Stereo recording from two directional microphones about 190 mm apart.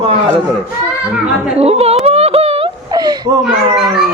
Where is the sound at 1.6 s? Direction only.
30° right (ahead or behind).